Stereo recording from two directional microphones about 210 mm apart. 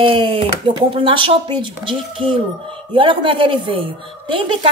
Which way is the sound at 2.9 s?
25° right (ahead or behind).